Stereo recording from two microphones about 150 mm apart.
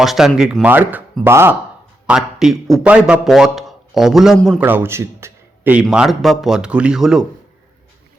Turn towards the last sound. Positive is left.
turn(degrees=-5)  # may be behind; listen again after turning